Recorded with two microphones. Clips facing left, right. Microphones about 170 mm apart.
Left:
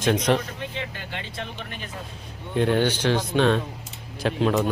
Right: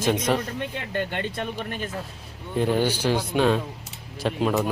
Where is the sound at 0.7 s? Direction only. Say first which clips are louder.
Right 5 dB; 50° right (ahead or behind).